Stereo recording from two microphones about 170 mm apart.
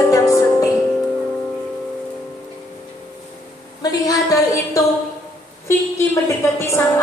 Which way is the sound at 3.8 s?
20° left (ahead or behind).